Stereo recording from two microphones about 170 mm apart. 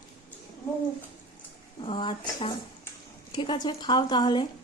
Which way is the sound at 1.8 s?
30° left (ahead or behind).